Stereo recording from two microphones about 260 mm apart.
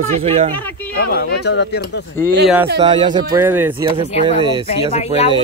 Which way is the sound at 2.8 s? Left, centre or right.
Centre.